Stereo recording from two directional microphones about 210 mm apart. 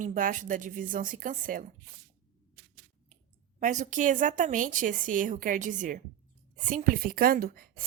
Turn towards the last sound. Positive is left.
turn(degrees=-45)  # may be behind; listen again after turning